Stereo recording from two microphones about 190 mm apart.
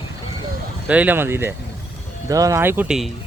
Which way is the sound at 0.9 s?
10° right (ahead or behind).